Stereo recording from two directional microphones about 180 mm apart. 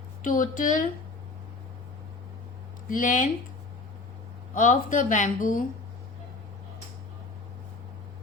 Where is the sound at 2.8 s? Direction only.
50° left (ahead or behind).